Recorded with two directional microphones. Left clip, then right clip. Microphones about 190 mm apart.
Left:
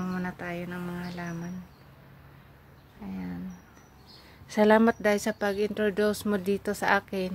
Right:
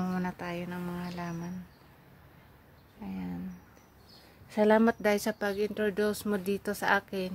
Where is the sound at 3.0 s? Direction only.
20° right (ahead or behind).